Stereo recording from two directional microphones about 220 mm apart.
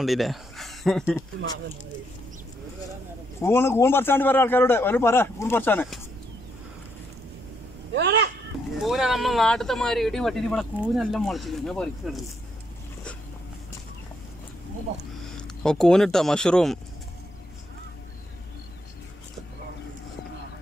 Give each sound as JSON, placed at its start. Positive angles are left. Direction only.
{"t": 0.0, "sound": "speech", "side_deg": 0}
{"t": 3.3, "sound": "a man's voice", "side_deg": 10}
{"t": 7.9, "sound": "speech", "side_deg": -50}
{"t": 8.8, "sound": "speech", "side_deg": 0}
{"t": 15.3, "sound": "speech", "side_deg": 5}